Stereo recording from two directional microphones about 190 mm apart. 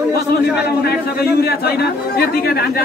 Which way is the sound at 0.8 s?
55° left (ahead or behind).